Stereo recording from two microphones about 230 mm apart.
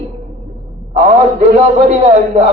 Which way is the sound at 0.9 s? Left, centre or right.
Right.